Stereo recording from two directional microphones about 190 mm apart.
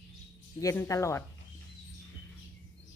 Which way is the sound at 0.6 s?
15° left (ahead or behind).